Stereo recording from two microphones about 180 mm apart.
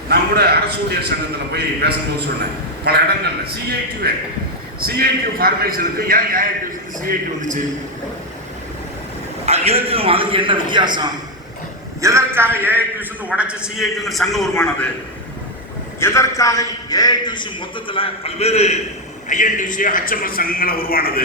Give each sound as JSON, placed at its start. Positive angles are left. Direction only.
{"t": 0.1, "sound": "a man's voice", "side_deg": -60}
{"t": 9.5, "sound": "a man's voice", "side_deg": -35}
{"t": 12.0, "sound": "a man's voice", "side_deg": -15}
{"t": 16.0, "sound": "a man's voice", "side_deg": 15}